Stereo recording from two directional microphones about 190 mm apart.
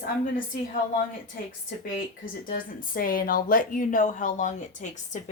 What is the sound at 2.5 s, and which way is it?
A woman's voice, 50° left (ahead or behind).